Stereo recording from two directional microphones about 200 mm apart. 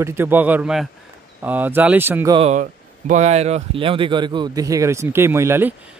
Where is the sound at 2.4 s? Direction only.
35° right (ahead or behind).